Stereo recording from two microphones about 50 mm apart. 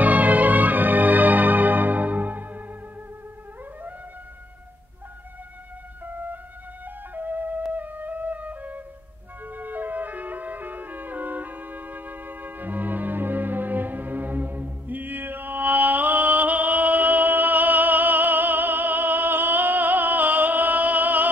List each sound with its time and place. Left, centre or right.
0.0 s music: right
7.2 s flute: right
9.5 s music: right